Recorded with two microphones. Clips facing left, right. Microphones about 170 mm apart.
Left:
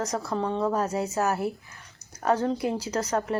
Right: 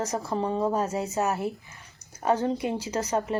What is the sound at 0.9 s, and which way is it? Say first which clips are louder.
Speech: left 1 dB; centre (ahead or behind).